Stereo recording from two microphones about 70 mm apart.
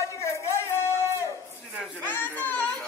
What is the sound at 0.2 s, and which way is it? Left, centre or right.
Music, left.